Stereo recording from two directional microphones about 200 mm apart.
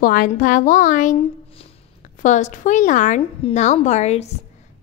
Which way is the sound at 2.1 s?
40° left (ahead or behind).